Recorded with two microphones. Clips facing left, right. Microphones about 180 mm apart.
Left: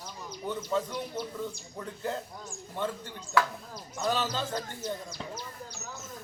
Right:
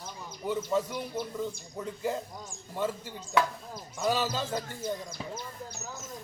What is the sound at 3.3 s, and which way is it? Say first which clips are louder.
Speech: even; 20° right (ahead or behind).